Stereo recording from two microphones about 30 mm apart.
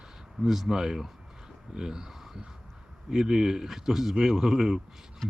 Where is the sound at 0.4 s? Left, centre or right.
Centre.